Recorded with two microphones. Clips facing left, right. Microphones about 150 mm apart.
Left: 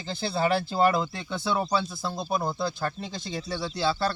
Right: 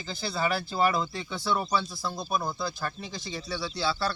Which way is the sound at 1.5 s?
25° left (ahead or behind).